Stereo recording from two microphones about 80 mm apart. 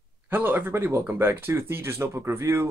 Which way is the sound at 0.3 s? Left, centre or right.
Right.